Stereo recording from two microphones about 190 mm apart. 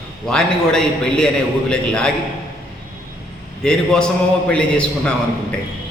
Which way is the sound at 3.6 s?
5° left (ahead or behind).